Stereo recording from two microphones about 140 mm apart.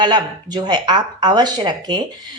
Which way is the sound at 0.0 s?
30° right (ahead or behind).